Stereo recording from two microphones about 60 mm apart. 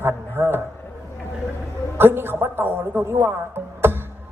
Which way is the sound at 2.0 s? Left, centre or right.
Right.